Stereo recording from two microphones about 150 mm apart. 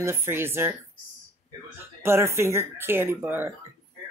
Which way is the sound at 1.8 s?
15° right (ahead or behind).